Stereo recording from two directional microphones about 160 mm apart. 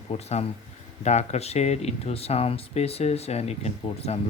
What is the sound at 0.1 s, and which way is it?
Speech, 40° left (ahead or behind).